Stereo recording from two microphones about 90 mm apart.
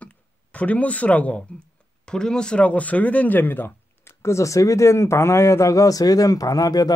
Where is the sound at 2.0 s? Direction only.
10° left (ahead or behind).